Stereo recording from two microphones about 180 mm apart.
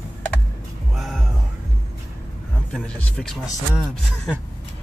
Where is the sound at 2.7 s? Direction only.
5° left (ahead or behind).